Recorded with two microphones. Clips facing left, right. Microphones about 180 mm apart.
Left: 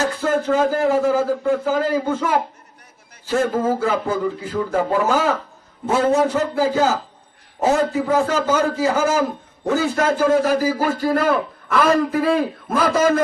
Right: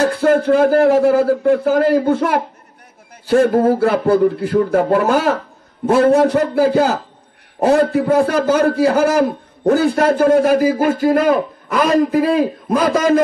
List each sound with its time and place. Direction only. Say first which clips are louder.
0.0 s a man's voice: right 6 dB; 70° right (ahead or behind); by 12.4 s 40° right (ahead or behind)